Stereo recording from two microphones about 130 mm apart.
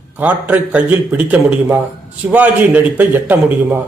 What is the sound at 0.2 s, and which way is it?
A man's voice, 10° right (ahead or behind).